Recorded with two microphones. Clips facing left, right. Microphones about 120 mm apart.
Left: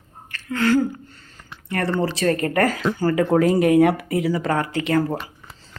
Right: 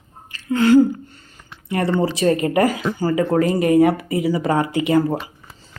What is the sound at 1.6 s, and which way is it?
Speech, 10° right (ahead or behind).